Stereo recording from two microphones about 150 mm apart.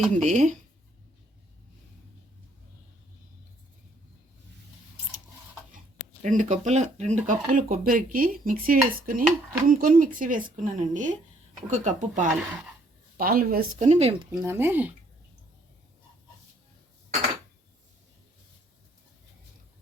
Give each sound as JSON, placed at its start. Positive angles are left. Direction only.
{"t": 0.1, "sound": "speech", "side_deg": -55}
{"t": 6.2, "sound": "speech", "side_deg": -50}
{"t": 13.1, "sound": "speech", "side_deg": -80}
{"t": 14.4, "sound": "speech", "side_deg": -15}